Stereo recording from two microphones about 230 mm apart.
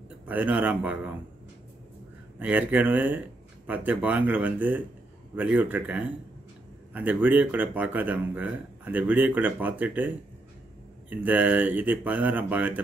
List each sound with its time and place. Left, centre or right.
0.3 s speech: centre
2.3 s speech: centre